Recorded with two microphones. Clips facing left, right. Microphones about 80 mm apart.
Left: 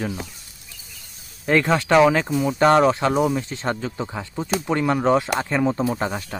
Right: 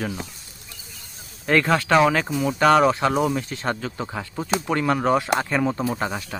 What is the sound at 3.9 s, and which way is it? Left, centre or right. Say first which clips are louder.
Speech: left 1 dB; centre.